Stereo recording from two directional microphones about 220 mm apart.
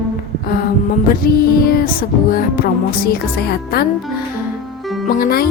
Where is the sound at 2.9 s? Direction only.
45° left (ahead or behind).